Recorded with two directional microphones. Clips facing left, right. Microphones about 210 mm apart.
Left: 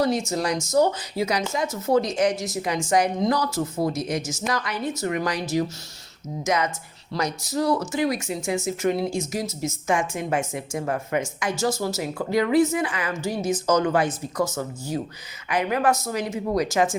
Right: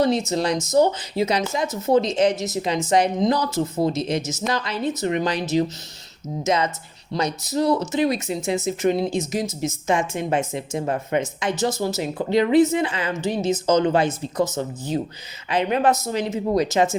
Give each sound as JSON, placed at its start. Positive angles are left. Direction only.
{"t": 0.0, "sound": "speech", "side_deg": -20}